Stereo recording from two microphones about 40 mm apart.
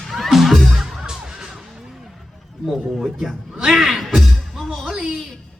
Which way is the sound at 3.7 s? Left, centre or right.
Centre.